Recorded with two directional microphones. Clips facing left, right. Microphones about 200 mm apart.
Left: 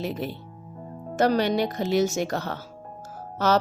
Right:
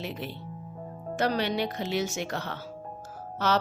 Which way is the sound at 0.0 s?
45° left (ahead or behind).